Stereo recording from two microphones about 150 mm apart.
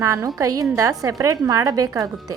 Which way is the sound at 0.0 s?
20° right (ahead or behind).